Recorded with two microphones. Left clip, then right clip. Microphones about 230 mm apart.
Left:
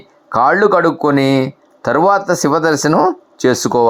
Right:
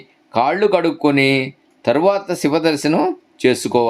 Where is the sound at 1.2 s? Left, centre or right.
Left.